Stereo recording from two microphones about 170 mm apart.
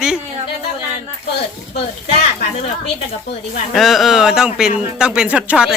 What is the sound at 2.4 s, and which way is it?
Speech, 65° left (ahead or behind).